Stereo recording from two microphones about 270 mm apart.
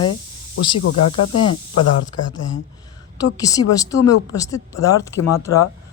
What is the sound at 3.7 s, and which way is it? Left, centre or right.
Speech, centre.